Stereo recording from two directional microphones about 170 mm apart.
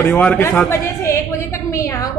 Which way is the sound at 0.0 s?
10° left (ahead or behind).